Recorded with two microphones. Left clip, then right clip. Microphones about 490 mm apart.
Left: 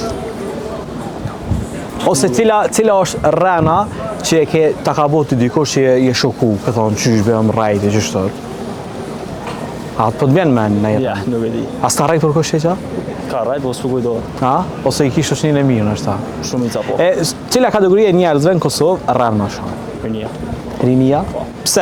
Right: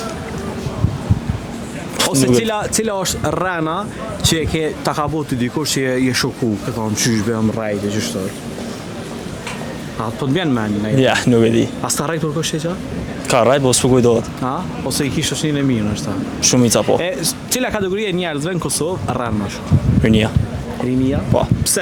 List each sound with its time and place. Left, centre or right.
2.0 s speech: centre
7.6 s speech: centre
10.0 s speech: centre
11.0 s speech: right
11.8 s speech: centre
13.3 s speech: right
14.4 s speech: centre
16.4 s speech: right
17.0 s speech: centre
20.8 s speech: centre